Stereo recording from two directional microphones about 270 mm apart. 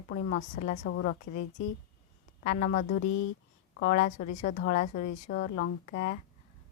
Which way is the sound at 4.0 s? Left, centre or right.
Left.